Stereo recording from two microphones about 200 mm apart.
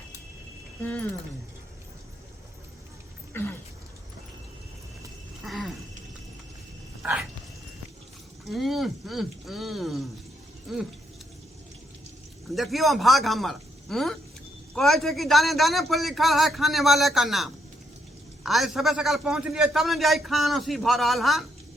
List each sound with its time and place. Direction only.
0.8 s speech: 10° left (ahead or behind)
3.3 s speech: 10° left (ahead or behind)
5.4 s a sound: centre (ahead or behind)
7.0 s dog: 5° right (ahead or behind)
8.4 s a man's voice: centre (ahead or behind)
12.5 s a man's voice: centre (ahead or behind)